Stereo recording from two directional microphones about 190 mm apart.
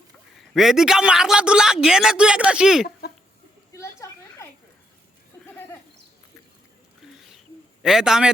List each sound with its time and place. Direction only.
0.5 s a man's voice: centre (ahead or behind)
3.7 s a sound: 15° left (ahead or behind)
7.8 s a man's voice: centre (ahead or behind)